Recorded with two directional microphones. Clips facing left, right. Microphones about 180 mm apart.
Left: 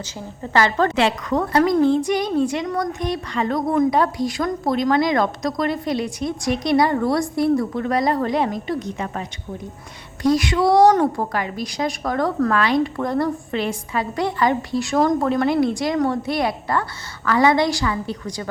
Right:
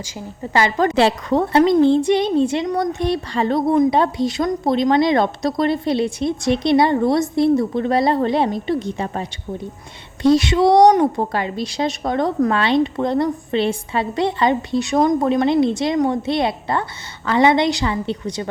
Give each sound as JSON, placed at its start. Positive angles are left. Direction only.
{"t": 0.5, "sound": "a woman's voice", "side_deg": -15}
{"t": 0.9, "sound": "a woman's voice", "side_deg": -30}
{"t": 10.2, "sound": "a woman's voice", "side_deg": -25}